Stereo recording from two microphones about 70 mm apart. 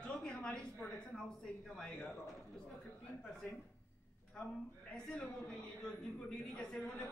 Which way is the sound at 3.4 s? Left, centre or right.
Centre.